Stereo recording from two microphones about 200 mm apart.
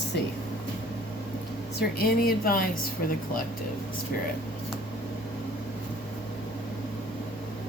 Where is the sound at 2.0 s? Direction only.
50° left (ahead or behind).